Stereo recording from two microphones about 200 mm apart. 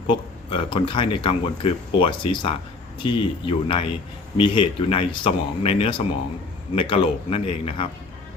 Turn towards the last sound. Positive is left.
turn(degrees=25)  # may be behind; listen again after turning